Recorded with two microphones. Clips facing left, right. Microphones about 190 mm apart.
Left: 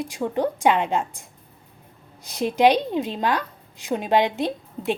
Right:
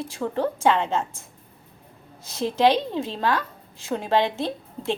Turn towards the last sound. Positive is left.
turn(degrees=15)  # may be behind; listen again after turning